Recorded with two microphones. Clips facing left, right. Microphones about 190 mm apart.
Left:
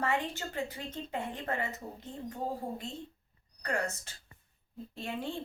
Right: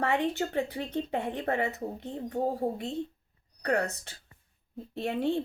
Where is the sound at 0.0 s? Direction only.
60° right (ahead or behind).